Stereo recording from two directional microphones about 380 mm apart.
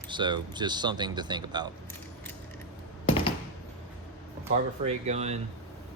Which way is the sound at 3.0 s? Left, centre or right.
Centre.